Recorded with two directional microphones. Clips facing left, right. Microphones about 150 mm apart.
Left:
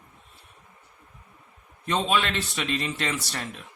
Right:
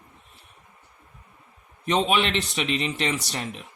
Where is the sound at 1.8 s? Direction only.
15° right (ahead or behind).